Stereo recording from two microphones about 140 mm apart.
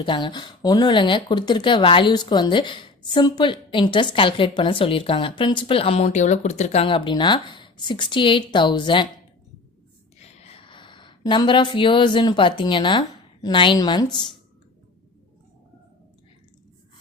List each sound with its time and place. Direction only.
0.0 s speech: 35° left (ahead or behind)
6.1 s speech: 60° left (ahead or behind); by 9.0 s 35° left (ahead or behind)
10.2 s speech: 50° left (ahead or behind); by 14.3 s 30° left (ahead or behind)